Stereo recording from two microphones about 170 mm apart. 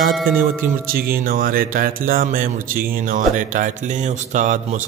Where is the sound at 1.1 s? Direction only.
60° right (ahead or behind).